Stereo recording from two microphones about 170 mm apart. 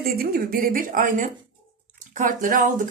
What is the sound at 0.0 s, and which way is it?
A woman's voice, 60° right (ahead or behind).